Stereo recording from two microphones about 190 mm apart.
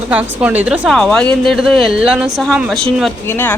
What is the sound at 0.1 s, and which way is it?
Speech, 10° right (ahead or behind).